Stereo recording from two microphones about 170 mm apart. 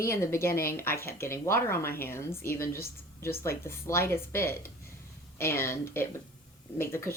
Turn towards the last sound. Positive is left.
turn(degrees=15)  # may be behind; listen again after turning